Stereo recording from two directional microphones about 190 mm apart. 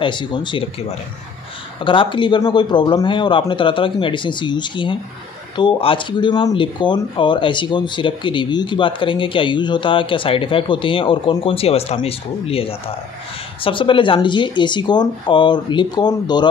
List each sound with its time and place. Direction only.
0.0 s speech: 25° left (ahead or behind)
1.9 s speech: 25° left (ahead or behind)